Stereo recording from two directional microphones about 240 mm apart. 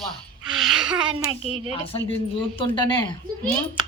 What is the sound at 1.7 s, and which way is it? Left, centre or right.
Speech, left.